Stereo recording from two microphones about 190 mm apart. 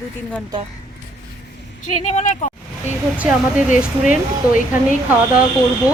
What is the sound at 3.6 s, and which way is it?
Speech, 40° left (ahead or behind).